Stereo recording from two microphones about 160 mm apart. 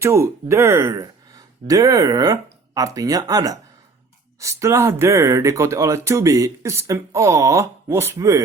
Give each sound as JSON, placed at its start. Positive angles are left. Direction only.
{"t": 0.0, "sound": "speech", "side_deg": -15}